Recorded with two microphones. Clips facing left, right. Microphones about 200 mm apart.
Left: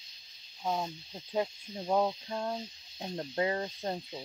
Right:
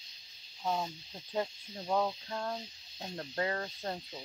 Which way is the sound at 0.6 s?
15° left (ahead or behind).